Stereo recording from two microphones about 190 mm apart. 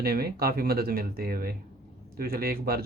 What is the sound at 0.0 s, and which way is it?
Speech, 55° right (ahead or behind).